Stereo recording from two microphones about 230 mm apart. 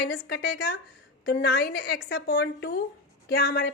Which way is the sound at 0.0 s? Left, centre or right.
Left.